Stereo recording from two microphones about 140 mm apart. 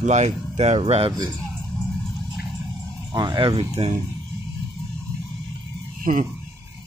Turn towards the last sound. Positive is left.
turn(degrees=-70)  # may be behind; listen again after turning